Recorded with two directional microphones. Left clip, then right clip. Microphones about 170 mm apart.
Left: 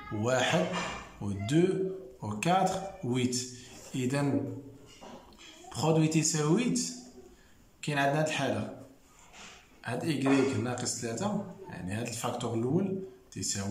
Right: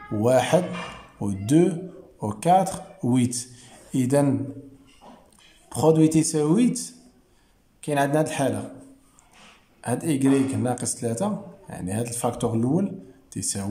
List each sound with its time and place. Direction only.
0.2 s a man's voice: 35° right (ahead or behind)
5.7 s speech: 35° right (ahead or behind)
9.8 s speech: 40° right (ahead or behind)